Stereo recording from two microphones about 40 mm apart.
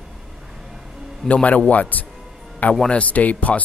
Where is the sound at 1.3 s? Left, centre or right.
Left.